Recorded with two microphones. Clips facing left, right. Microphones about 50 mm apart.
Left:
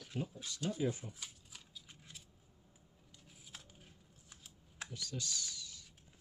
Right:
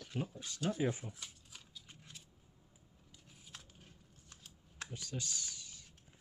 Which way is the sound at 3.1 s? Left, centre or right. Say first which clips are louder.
Even; centre.